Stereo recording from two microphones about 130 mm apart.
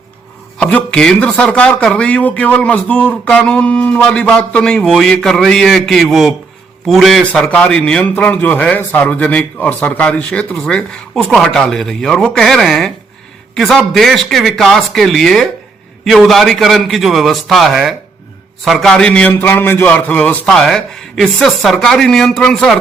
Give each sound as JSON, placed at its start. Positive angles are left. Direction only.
{"t": 0.6, "sound": "a man's voice", "side_deg": 5}